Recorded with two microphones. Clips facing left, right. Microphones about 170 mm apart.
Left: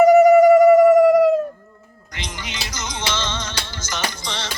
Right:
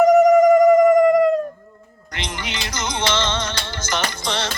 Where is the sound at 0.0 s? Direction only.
Centre (ahead or behind).